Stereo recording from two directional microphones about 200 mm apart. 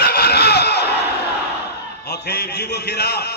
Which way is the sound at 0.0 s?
50° left (ahead or behind).